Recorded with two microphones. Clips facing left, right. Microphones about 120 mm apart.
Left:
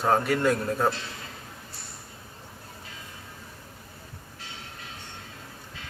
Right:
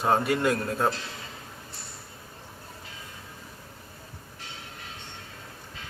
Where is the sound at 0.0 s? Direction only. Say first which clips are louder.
Left 1 dB; 5° right (ahead or behind).